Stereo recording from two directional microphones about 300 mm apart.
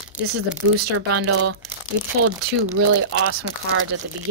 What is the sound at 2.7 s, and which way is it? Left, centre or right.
Speech, right.